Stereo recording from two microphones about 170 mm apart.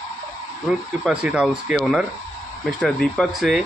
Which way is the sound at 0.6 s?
5° right (ahead or behind).